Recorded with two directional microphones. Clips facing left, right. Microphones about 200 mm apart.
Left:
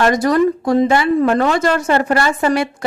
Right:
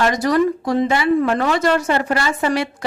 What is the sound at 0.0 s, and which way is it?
A woman's voice, 50° left (ahead or behind).